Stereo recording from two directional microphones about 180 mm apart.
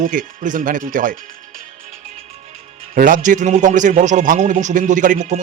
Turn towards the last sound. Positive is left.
turn(degrees=-45)  # may be behind; listen again after turning